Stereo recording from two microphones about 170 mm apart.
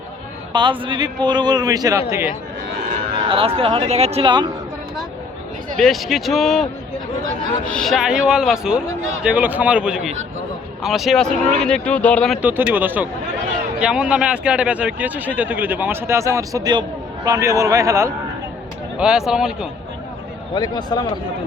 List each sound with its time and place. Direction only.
0.5 s a man's voice: 25° right (ahead or behind)
3.2 s speech: 35° right (ahead or behind)
5.7 s speech: centre (ahead or behind)
7.7 s speech: centre (ahead or behind)
12.4 s speech: 10° right (ahead or behind)
18.9 s speech: 5° right (ahead or behind)
20.5 s a man's voice: 25° left (ahead or behind)